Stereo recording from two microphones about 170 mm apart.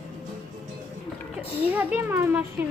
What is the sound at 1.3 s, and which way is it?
A child's voice, 10° right (ahead or behind).